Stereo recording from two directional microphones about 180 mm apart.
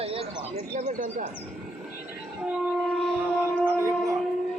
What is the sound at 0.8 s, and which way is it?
Speech, 45° right (ahead or behind).